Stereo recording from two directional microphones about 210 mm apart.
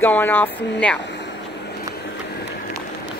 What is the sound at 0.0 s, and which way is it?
Speech, 10° left (ahead or behind).